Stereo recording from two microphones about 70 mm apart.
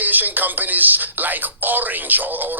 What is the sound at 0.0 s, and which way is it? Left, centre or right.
Speech, right.